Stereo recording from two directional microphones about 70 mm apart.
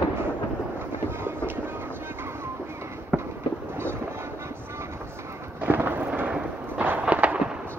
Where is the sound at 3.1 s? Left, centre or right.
Centre.